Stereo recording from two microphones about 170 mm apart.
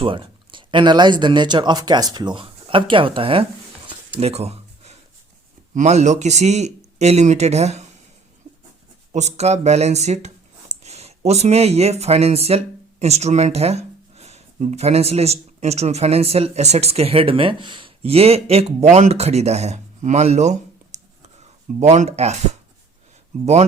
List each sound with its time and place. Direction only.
0.0 s speech: 30° right (ahead or behind)
3.8 s a sound: 35° right (ahead or behind)
5.7 s speech: 45° right (ahead or behind)
9.1 s speech: 40° right (ahead or behind)